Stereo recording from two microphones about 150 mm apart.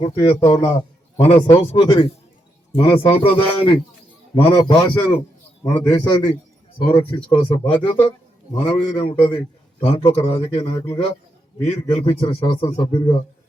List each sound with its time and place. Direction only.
0.0 s a man's voice: 40° left (ahead or behind)
0.6 s a sound: 20° left (ahead or behind)
1.2 s a man's voice: 40° left (ahead or behind)
5.6 s a man's voice: 15° left (ahead or behind)
6.8 s a man's voice: 35° left (ahead or behind)
10.8 s a man's voice: 25° left (ahead or behind)
11.6 s a man's voice: 40° left (ahead or behind)